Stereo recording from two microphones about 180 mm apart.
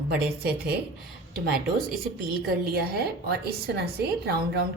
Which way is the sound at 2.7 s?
60° right (ahead or behind).